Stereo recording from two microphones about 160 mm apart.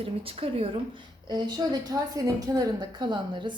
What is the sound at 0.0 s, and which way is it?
A woman's voice, 35° right (ahead or behind).